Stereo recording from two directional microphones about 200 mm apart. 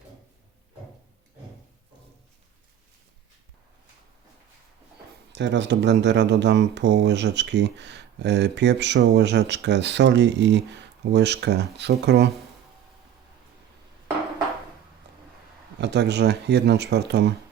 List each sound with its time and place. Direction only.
5.3 s speech: 60° right (ahead or behind)
15.8 s speech: 60° right (ahead or behind)